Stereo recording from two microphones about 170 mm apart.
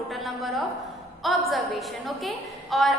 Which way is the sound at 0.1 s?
Centre (ahead or behind).